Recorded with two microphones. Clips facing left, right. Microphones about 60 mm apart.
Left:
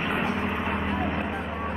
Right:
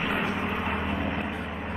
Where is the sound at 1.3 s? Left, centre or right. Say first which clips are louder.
Left 3 dB; left.